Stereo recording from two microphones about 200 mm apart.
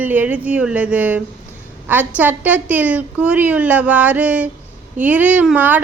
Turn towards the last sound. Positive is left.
turn(degrees=-10)  # may be behind; listen again after turning